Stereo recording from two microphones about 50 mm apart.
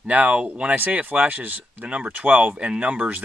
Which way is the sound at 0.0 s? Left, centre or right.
Right.